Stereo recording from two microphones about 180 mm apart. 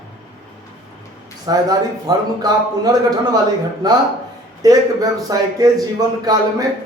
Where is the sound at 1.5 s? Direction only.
20° right (ahead or behind).